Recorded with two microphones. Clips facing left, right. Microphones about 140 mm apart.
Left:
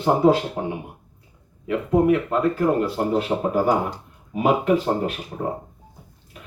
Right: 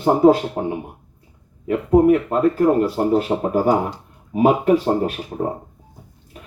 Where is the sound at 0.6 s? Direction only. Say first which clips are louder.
Right 4 dB; 30° right (ahead or behind).